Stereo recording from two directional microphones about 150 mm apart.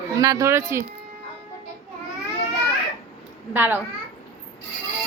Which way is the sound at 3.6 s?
15° right (ahead or behind).